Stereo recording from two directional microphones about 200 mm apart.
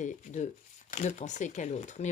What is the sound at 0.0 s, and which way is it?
Speech, 35° left (ahead or behind).